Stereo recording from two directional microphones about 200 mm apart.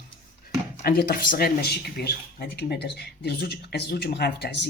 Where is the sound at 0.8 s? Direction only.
50° left (ahead or behind).